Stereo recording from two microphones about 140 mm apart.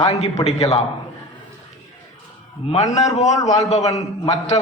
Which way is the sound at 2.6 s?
45° left (ahead or behind).